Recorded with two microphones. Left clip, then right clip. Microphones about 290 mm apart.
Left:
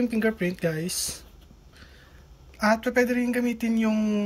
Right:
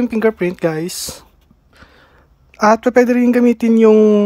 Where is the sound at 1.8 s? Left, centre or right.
Centre.